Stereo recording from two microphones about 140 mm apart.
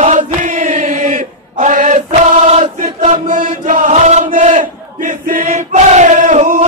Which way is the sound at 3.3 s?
70° right (ahead or behind).